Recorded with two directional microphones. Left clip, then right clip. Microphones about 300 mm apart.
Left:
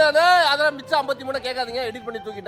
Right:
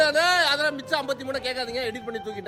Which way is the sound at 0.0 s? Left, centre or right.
Centre.